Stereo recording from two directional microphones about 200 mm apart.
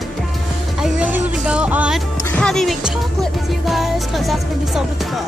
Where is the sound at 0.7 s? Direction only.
5° right (ahead or behind).